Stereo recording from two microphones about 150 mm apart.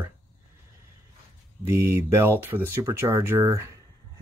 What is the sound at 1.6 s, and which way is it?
Speech, 15° right (ahead or behind).